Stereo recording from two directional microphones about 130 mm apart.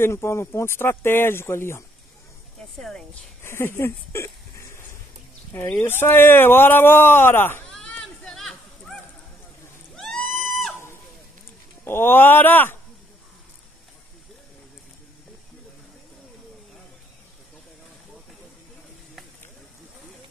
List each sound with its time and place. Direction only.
0.0 s speech: 20° left (ahead or behind)
2.8 s speech: 5° left (ahead or behind)
3.4 s speech: 20° left (ahead or behind)
7.7 s a sound: 5° left (ahead or behind)
11.8 s speech: 15° left (ahead or behind)